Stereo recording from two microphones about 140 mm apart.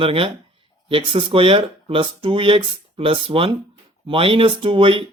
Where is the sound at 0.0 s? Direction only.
40° right (ahead or behind).